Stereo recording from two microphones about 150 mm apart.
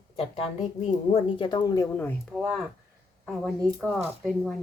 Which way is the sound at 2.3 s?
Centre (ahead or behind).